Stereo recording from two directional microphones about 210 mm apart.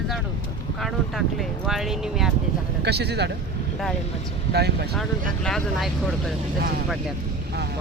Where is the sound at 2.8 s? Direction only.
50° right (ahead or behind).